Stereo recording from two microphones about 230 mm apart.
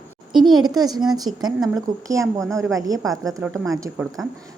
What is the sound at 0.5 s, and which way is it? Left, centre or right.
A woman's voice, centre.